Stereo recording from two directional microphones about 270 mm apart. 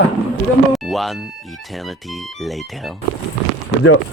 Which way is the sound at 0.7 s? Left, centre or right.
Centre.